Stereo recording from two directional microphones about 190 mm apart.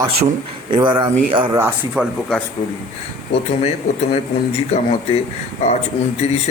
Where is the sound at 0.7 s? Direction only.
25° right (ahead or behind).